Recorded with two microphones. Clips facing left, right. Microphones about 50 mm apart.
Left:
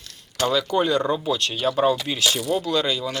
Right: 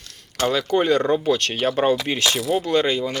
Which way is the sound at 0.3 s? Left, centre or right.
Right.